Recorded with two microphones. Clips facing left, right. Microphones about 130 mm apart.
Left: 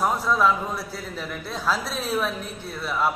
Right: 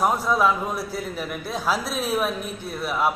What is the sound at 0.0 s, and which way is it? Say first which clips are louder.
A man's voice: right 1 dB; 15° right (ahead or behind).